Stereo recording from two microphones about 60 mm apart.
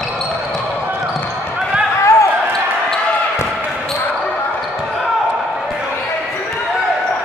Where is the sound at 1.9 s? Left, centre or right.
Left.